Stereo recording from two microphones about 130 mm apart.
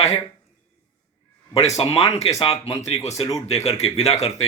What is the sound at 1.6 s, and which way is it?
Speech, 55° left (ahead or behind).